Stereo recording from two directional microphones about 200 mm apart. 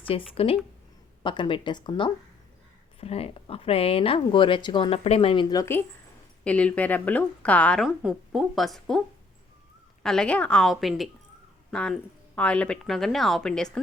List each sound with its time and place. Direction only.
0.1 s a woman's voice: 30° left (ahead or behind); by 9.0 s centre (ahead or behind)
10.0 s a woman's voice: 5° left (ahead or behind)